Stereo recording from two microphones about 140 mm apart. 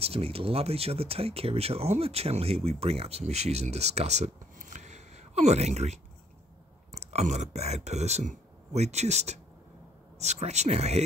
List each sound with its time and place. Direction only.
0.0 s speech: 45° right (ahead or behind)
7.0 s speech: 50° right (ahead or behind)